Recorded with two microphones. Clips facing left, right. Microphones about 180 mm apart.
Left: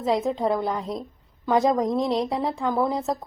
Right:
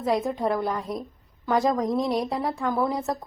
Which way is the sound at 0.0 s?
20° left (ahead or behind).